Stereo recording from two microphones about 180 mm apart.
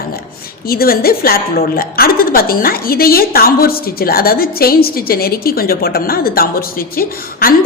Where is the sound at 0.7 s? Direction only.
55° left (ahead or behind).